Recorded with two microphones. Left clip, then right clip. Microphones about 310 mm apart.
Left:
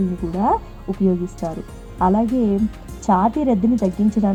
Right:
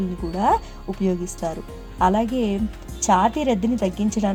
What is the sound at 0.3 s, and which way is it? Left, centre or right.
Speech, right.